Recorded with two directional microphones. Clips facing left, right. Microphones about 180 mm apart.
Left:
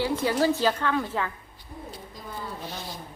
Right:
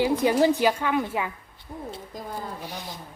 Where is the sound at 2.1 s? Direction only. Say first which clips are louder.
Right 6 dB; 45° right (ahead or behind).